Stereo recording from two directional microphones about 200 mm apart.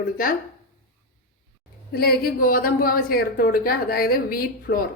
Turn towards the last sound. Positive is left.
turn(degrees=45)  # may be behind; listen again after turning